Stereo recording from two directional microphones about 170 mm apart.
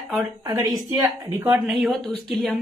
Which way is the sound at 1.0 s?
10° right (ahead or behind).